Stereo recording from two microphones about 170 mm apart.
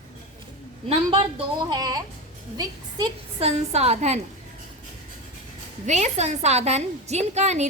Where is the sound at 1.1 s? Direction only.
25° right (ahead or behind).